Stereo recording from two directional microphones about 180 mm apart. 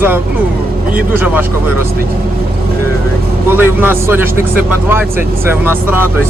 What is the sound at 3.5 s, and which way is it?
Speech, 10° right (ahead or behind).